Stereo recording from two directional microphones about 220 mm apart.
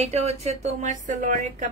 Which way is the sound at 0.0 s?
30° right (ahead or behind).